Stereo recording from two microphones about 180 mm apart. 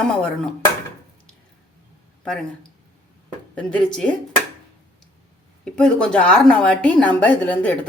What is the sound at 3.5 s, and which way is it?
Speech, 5° left (ahead or behind).